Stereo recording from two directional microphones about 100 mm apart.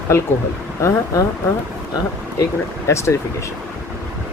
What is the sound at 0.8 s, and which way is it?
Speech, 30° left (ahead or behind).